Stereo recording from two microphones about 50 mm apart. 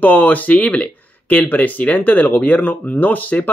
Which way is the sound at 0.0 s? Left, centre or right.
Left.